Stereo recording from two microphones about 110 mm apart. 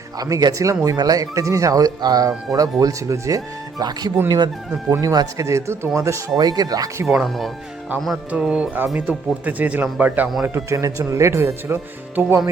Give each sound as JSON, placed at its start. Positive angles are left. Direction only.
{"t": 0.2, "sound": "speech", "side_deg": -35}
{"t": 7.1, "sound": "speech", "side_deg": -5}
{"t": 8.3, "sound": "speech", "side_deg": -10}
{"t": 10.4, "sound": "speech", "side_deg": -25}